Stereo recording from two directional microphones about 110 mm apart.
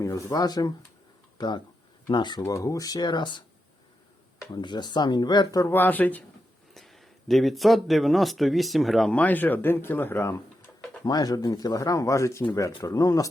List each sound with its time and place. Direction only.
0.0 s speech: 30° left (ahead or behind)
2.4 s speech: 30° left (ahead or behind)
4.5 s speech: 40° left (ahead or behind)
5.7 s speech: 15° left (ahead or behind)
6.7 s speech: centre (ahead or behind)
9.1 s speech: 15° left (ahead or behind)
11.0 s speech: 35° left (ahead or behind)